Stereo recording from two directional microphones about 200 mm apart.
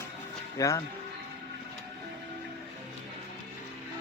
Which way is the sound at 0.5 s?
15° left (ahead or behind).